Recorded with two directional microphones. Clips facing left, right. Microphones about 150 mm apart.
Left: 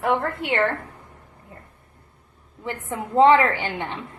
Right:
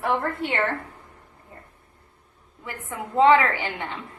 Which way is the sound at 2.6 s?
25° left (ahead or behind).